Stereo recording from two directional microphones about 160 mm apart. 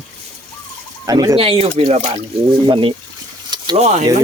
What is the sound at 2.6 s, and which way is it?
Speech, 30° right (ahead or behind).